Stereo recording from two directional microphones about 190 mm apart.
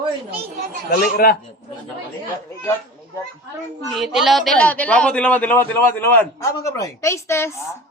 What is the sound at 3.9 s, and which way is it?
A man's voice, centre (ahead or behind).